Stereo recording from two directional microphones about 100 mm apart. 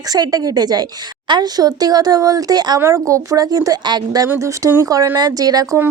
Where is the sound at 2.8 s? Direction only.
30° right (ahead or behind).